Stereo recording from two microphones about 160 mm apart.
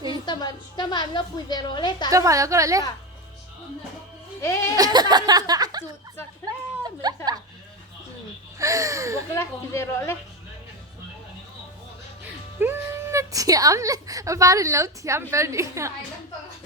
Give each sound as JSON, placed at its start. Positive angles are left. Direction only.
{"t": 0.1, "sound": "a woman's voice", "side_deg": 25}
{"t": 2.0, "sound": "a woman's voice", "side_deg": -20}
{"t": 4.4, "sound": "music", "side_deg": 20}
{"t": 4.7, "sound": "speech", "side_deg": -25}
{"t": 7.0, "sound": "a sound", "side_deg": -25}
{"t": 8.5, "sound": "a woman's voice", "side_deg": -20}
{"t": 9.3, "sound": "a woman's voice", "side_deg": 15}
{"t": 12.5, "sound": "a woman's voice", "side_deg": -15}